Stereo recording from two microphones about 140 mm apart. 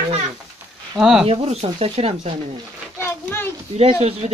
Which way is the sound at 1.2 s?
45° right (ahead or behind).